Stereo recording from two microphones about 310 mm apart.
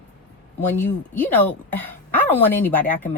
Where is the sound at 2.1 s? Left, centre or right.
Centre.